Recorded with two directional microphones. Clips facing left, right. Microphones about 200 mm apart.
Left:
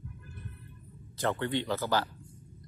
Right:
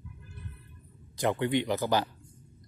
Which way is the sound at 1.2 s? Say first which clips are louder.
Right 3 dB; 15° right (ahead or behind).